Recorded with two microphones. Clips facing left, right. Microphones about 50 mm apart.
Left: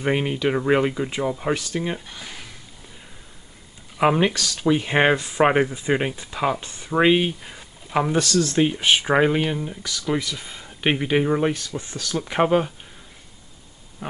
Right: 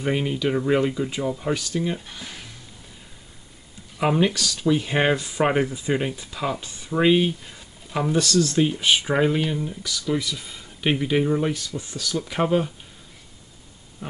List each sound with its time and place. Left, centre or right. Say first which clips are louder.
0.0 s speech: left 2 dB; left
2.0 s speech: left 1 dB; centre
4.0 s speech: left 2 dB; left
12.2 s speech: left 3 dB; left